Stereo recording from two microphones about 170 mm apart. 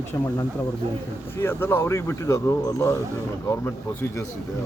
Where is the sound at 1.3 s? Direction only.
15° left (ahead or behind).